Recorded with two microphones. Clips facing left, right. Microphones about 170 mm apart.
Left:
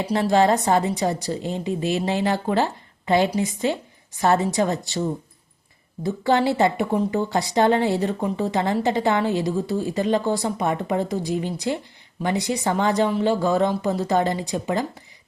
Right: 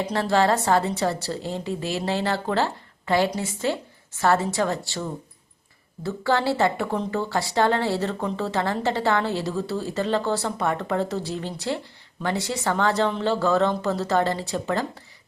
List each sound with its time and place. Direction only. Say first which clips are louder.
0.0 s speech: left 3 dB; 15° left (ahead or behind)